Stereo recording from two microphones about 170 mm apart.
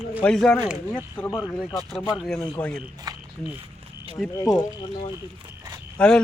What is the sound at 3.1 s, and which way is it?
Speech, 25° right (ahead or behind).